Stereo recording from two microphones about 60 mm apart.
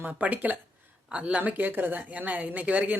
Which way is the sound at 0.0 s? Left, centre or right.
Right.